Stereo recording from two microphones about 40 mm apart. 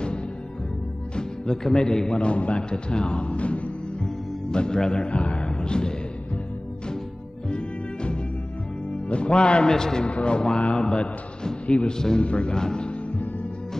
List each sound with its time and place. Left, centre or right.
1.1 s a man's voice: centre; by 3.7 s left
4.0 s music: centre
7.4 s music: left
9.1 s a man's voice: left
9.7 s a man's voice: centre
10.0 s a man's voice: left